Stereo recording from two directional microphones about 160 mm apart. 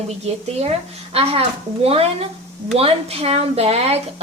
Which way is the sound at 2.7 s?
40° right (ahead or behind).